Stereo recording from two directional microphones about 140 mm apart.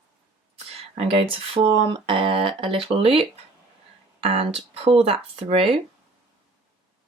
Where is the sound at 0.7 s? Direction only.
45° right (ahead or behind).